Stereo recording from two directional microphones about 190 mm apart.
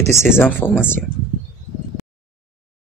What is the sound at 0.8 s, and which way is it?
Speech, 10° left (ahead or behind).